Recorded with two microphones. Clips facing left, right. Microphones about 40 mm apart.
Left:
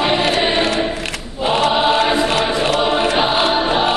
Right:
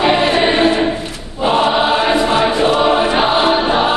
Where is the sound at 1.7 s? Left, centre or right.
Centre.